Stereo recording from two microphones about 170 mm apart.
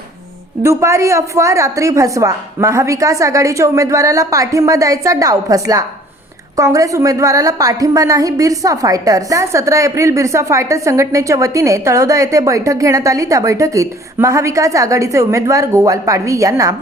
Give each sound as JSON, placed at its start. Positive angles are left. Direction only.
{"t": 0.6, "sound": "a woman's voice", "side_deg": -15}